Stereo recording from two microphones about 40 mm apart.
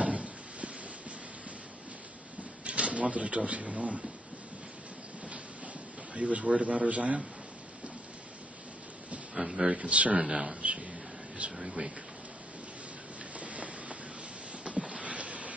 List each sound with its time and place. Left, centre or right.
0.0 s a sound: right
2.6 s speech: right
6.1 s a man's voice: right
9.3 s a sound: centre
9.8 s a man's voice: right
10.2 s a man's voice: centre
10.5 s a man's voice: right
11.6 s speech: centre
13.4 s a sound: right